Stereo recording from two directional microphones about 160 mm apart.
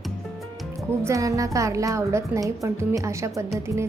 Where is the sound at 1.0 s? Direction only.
20° right (ahead or behind).